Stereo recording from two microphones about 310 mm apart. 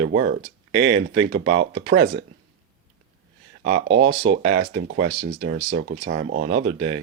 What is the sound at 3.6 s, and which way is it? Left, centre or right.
Speech, right.